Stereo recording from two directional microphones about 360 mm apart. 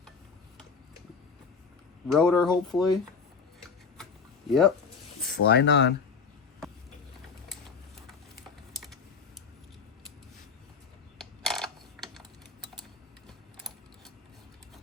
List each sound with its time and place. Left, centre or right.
2.1 s speech: centre
4.4 s speech: centre
5.2 s speech: left
11.2 s computer keyboard: centre
13.2 s mechanisms: centre